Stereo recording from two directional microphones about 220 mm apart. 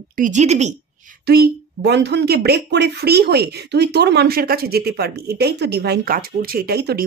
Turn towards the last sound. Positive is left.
turn(degrees=-45)  # may be behind; listen again after turning